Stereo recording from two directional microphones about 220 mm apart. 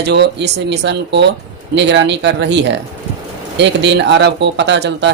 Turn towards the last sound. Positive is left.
turn(degrees=-50)  # may be behind; listen again after turning